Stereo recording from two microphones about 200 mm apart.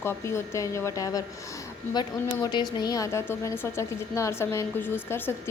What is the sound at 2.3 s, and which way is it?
A woman's voice, 20° left (ahead or behind).